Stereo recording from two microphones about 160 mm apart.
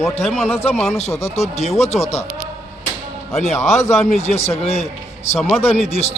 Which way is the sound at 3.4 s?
45° left (ahead or behind).